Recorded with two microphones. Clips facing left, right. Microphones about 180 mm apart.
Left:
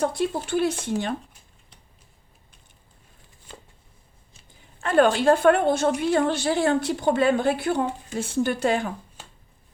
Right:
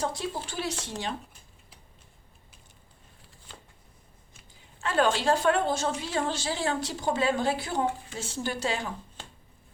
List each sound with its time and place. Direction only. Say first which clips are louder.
0.0 s a woman's voice: left 7 dB; 60° left (ahead or behind)
4.8 s a woman's voice: left 6 dB; 55° left (ahead or behind)